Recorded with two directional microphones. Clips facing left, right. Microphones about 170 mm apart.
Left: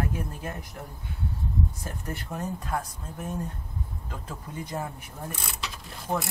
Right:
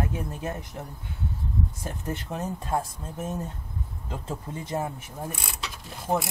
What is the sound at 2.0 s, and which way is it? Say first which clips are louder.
Speech: right 2 dB; 20° right (ahead or behind).